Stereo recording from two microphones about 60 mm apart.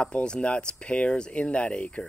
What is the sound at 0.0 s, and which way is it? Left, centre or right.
Speech, centre.